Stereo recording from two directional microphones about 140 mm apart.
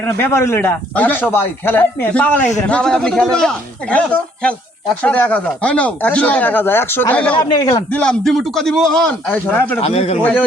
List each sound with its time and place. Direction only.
0.0 s a man's voice: 15° left (ahead or behind)
7.3 s a man's voice: 25° left (ahead or behind)
7.9 s a man's voice: 10° left (ahead or behind)
9.8 s a man's voice: 45° left (ahead or behind)